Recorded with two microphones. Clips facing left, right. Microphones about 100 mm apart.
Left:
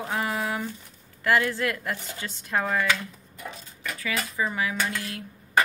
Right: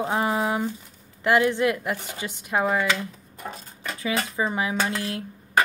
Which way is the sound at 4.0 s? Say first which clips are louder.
Right 3 dB; 25° right (ahead or behind).